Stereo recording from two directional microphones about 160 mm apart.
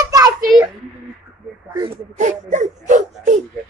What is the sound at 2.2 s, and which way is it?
Whimper, 50° right (ahead or behind).